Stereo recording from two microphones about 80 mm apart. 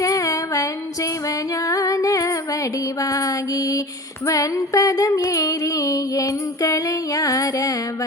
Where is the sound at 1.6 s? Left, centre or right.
Left.